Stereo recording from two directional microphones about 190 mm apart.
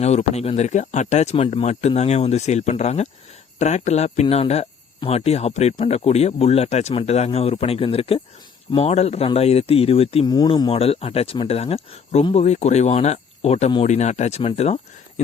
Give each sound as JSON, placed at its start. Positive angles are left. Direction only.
{"t": 0.0, "sound": "speech", "side_deg": 35}